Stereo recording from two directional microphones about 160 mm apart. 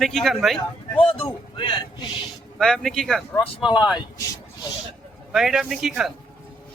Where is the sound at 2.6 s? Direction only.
5° left (ahead or behind).